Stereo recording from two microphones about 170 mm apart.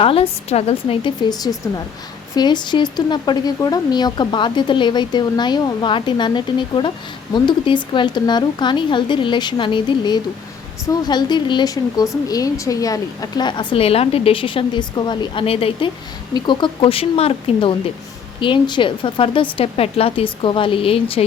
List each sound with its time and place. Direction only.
0.0 s speech: 35° left (ahead or behind)